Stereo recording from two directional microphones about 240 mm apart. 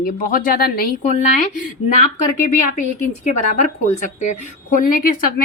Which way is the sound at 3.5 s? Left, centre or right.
Left.